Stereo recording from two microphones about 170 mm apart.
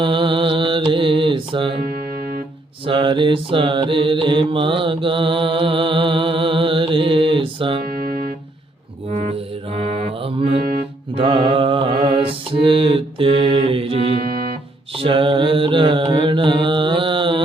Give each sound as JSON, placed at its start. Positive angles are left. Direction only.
{"t": 0.0, "sound": "mantra", "side_deg": -30}
{"t": 2.8, "sound": "mantra", "side_deg": -30}
{"t": 7.9, "sound": "music", "side_deg": -55}
{"t": 9.0, "sound": "music", "side_deg": -40}
{"t": 11.1, "sound": "mantra", "side_deg": -30}
{"t": 14.2, "sound": "music", "side_deg": -60}
{"t": 14.9, "sound": "mantra", "side_deg": -30}